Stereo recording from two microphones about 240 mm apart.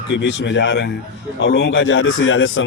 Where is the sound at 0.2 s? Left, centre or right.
Left.